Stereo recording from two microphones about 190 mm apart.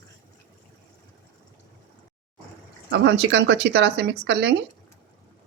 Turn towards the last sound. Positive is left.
turn(degrees=-60)  # may be behind; listen again after turning